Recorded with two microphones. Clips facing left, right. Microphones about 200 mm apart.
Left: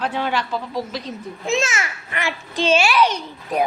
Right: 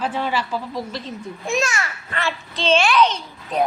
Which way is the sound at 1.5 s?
25° left (ahead or behind).